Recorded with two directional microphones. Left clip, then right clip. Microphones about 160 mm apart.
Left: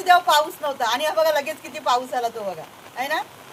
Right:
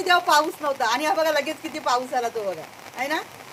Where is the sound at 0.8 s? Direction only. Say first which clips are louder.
Left 2 dB; 20° right (ahead or behind).